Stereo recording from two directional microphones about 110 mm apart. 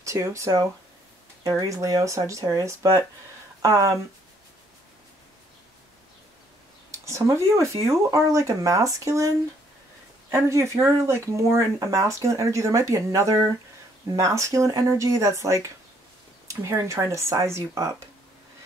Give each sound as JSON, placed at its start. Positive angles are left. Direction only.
{"t": 0.0, "sound": "speech", "side_deg": -30}
{"t": 6.9, "sound": "a sound", "side_deg": -30}
{"t": 7.8, "sound": "speech", "side_deg": -30}
{"t": 10.3, "sound": "speech", "side_deg": -25}